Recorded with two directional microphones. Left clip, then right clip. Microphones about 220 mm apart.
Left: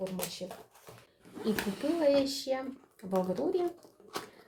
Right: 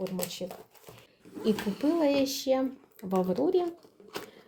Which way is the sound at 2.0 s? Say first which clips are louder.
Left 2 dB; 45° right (ahead or behind).